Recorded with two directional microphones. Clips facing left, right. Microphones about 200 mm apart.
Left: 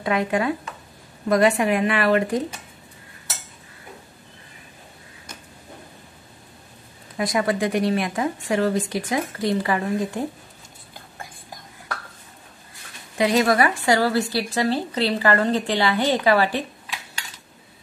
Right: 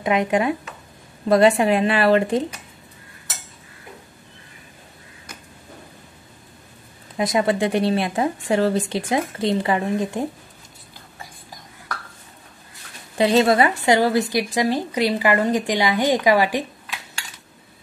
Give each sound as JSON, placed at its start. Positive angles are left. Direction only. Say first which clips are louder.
{"t": 0.0, "sound": "speech", "louder": "right 2 dB", "side_deg": -20}
{"t": 7.2, "sound": "speech", "louder": "right 2 dB", "side_deg": -20}
{"t": 13.2, "sound": "speech", "louder": "right 3 dB", "side_deg": -30}